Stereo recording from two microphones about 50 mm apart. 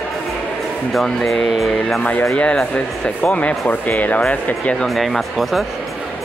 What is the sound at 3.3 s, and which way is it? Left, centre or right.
Speech, left.